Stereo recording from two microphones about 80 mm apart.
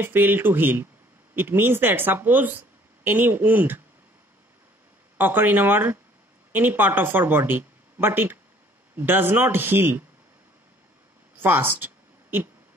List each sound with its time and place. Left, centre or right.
0.0 s speech: right
5.1 s speech: right
11.3 s a sound: right